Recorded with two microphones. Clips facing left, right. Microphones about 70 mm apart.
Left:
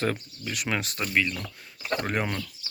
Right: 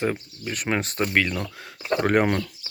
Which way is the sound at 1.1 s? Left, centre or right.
Right.